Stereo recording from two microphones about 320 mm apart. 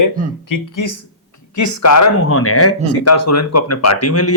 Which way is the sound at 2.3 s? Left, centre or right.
Left.